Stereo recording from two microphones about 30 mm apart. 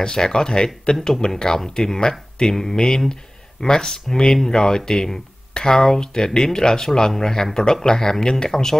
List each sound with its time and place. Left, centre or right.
0.0 s speech: left
0.9 s speech: left
1.3 s speech: centre